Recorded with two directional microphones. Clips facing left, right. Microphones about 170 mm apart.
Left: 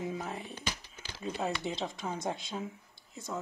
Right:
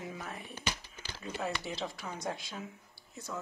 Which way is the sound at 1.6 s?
20° left (ahead or behind).